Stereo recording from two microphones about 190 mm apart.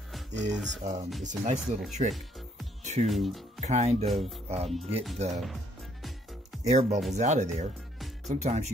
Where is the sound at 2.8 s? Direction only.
40° right (ahead or behind).